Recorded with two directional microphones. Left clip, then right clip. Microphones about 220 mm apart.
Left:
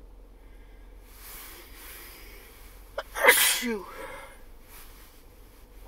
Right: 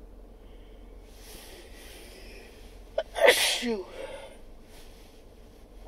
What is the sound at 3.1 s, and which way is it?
Sneeze, 40° left (ahead or behind).